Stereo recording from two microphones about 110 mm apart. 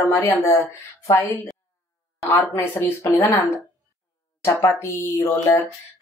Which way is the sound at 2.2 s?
25° left (ahead or behind).